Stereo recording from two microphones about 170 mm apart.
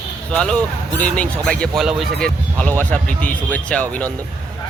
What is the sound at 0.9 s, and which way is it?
Speech, 5° left (ahead or behind).